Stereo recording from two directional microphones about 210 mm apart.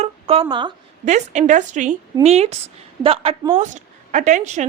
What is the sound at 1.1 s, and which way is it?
A woman's voice, 35° right (ahead or behind).